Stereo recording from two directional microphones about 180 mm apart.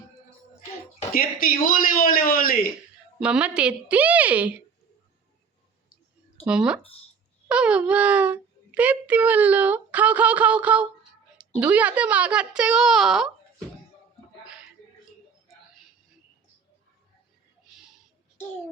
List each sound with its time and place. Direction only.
1.1 s a man's voice: 55° left (ahead or behind)
3.2 s a child's voice: 5° right (ahead or behind)
6.4 s a child's voice: 5° right (ahead or behind)